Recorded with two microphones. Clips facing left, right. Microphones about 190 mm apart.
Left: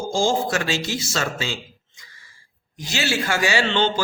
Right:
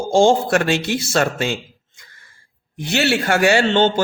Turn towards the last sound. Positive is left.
turn(degrees=-50)  # may be behind; listen again after turning